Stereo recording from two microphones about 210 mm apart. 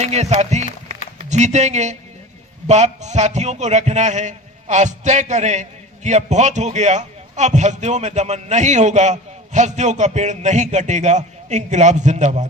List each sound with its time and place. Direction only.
0.0 s a man's voice: 30° right (ahead or behind)